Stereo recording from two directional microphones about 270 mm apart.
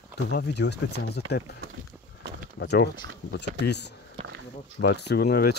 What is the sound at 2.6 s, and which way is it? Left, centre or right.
Speech, left.